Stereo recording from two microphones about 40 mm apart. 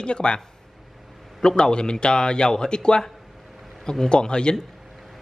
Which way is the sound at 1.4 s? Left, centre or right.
Centre.